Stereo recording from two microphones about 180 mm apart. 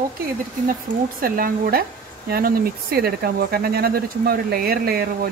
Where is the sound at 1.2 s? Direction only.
55° right (ahead or behind).